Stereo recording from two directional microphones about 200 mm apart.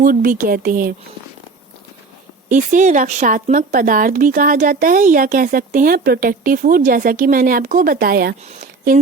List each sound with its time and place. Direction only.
0.0 s speech: 45° right (ahead or behind)
2.5 s speech: 40° right (ahead or behind)